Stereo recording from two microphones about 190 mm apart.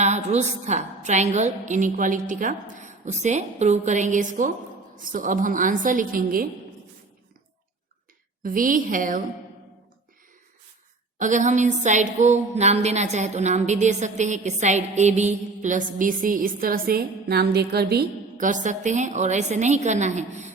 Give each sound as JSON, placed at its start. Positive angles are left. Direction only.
{"t": 0.0, "sound": "a woman's voice", "side_deg": -35}
{"t": 8.4, "sound": "a woman's voice", "side_deg": -45}
{"t": 11.2, "sound": "a woman's voice", "side_deg": -40}